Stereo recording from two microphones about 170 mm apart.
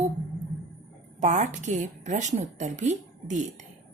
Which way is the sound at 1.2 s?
45° right (ahead or behind).